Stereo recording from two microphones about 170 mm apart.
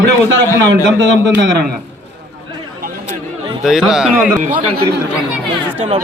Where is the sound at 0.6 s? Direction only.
90° right.